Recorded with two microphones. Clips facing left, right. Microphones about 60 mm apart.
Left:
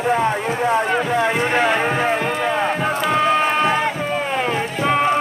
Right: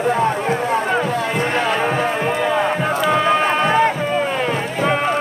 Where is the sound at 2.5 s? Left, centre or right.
Centre.